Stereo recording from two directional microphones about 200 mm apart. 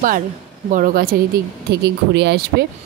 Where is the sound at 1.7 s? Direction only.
55° right (ahead or behind).